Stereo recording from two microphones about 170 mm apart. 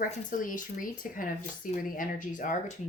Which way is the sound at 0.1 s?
50° left (ahead or behind).